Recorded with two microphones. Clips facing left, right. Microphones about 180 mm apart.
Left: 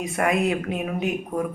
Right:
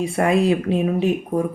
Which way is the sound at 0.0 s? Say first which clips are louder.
Right 4 dB; 30° right (ahead or behind).